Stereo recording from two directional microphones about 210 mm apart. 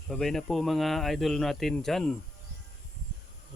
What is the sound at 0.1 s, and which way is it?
Speech, centre (ahead or behind).